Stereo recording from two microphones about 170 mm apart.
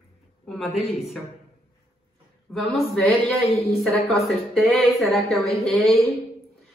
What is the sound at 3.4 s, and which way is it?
Speech, 40° left (ahead or behind).